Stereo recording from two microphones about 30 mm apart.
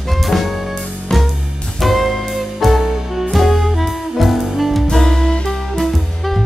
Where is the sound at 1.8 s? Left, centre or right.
Centre.